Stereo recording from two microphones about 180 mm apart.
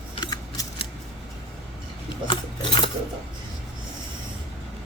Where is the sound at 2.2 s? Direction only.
25° left (ahead or behind).